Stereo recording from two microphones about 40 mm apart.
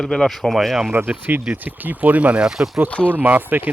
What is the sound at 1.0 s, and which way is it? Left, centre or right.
Speech, right.